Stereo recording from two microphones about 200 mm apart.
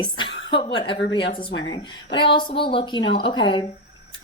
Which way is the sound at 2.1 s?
25° left (ahead or behind).